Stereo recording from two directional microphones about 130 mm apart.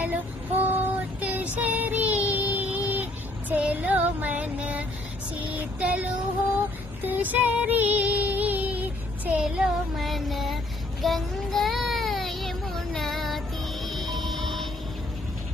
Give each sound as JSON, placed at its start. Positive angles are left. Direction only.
{"t": 0.0, "sound": "child singing", "side_deg": -15}
{"t": 5.5, "sound": "music", "side_deg": -10}
{"t": 11.0, "sound": "child singing", "side_deg": 0}
{"t": 13.8, "sound": "music", "side_deg": 0}